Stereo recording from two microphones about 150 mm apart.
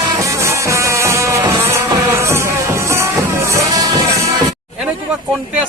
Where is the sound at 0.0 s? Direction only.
20° right (ahead or behind).